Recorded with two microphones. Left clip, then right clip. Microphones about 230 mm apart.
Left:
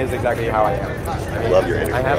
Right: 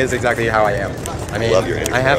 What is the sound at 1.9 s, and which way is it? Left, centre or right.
Speech, right.